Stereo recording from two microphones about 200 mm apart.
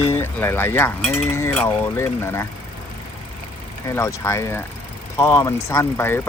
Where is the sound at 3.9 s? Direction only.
15° left (ahead or behind).